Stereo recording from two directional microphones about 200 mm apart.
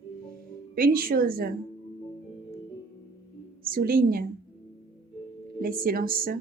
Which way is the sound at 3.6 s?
45° right (ahead or behind).